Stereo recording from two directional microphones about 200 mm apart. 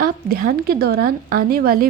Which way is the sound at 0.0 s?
45° right (ahead or behind).